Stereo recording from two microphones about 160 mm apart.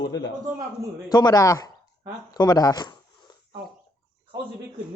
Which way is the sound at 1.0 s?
25° left (ahead or behind).